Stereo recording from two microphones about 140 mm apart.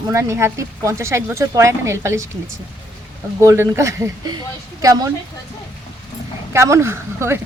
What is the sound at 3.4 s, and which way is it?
Speech, 20° right (ahead or behind).